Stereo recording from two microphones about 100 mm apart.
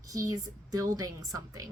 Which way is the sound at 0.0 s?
35° right (ahead or behind).